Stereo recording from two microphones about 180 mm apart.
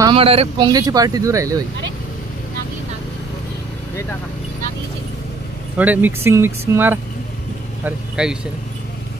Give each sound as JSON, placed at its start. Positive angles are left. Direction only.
{"t": 0.1, "sound": "speech", "side_deg": -30}
{"t": 5.8, "sound": "speech", "side_deg": -10}